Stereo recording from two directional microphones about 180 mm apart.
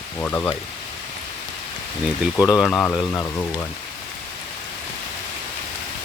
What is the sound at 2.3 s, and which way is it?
Speech, 20° left (ahead or behind).